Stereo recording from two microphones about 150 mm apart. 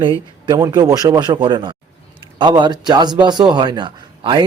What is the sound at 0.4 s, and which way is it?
A man's voice, 25° right (ahead or behind).